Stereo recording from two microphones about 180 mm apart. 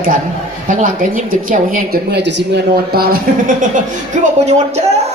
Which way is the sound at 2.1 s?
75° right (ahead or behind).